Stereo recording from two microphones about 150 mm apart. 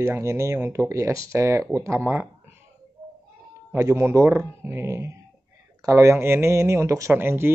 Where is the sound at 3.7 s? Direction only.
20° right (ahead or behind).